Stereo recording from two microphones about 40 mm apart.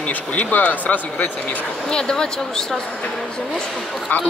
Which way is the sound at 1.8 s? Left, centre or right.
Centre.